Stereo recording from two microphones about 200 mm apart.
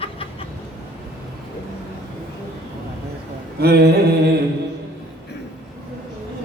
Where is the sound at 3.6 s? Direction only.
55° right (ahead or behind).